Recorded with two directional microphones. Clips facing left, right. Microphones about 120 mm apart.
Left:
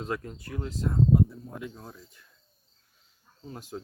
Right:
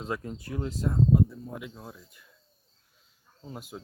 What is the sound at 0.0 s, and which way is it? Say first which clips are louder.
Speech: even; 20° right (ahead or behind).